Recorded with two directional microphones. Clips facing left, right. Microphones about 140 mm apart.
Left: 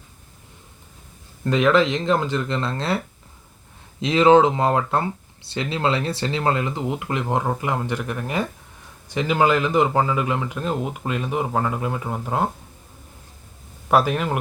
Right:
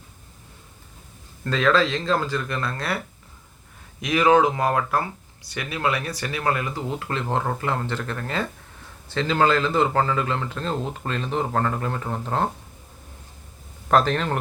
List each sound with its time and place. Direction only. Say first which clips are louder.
1.5 s speech: left 3 dB; 20° left (ahead or behind)
4.0 s speech: left 3 dB; 25° left (ahead or behind); by 12.5 s 10° left (ahead or behind)
13.8 s speech: left 1 dB; 10° left (ahead or behind)